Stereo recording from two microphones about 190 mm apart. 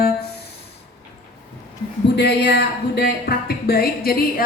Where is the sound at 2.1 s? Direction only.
60° left (ahead or behind).